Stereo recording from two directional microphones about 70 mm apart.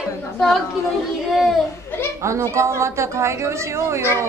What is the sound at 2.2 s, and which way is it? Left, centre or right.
A woman's voice, right.